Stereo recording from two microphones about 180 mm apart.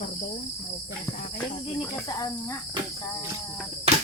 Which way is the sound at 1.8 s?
20° left (ahead or behind).